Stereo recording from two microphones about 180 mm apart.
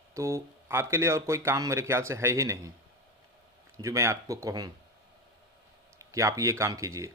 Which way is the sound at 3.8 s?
15° right (ahead or behind).